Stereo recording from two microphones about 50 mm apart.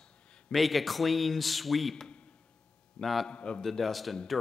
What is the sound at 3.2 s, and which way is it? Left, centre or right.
Speech, left.